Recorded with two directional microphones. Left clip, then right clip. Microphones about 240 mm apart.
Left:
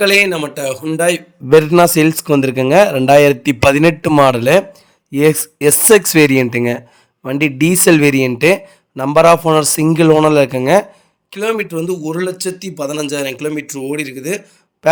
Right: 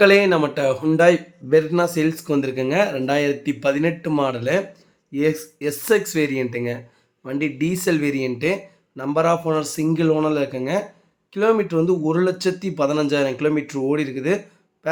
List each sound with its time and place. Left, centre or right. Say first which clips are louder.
0.4 s speech: even; centre
1.5 s speech: left 9 dB; left
11.9 s speech: even; centre